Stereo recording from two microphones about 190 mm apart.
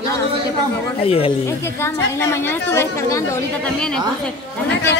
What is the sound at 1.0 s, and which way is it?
Speech, 30° left (ahead or behind).